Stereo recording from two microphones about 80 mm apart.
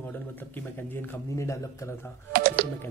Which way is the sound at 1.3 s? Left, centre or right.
Left.